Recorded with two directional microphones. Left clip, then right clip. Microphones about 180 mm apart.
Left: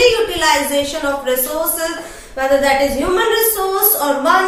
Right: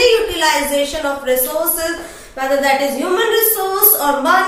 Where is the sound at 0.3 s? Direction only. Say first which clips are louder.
Even; 10° left (ahead or behind).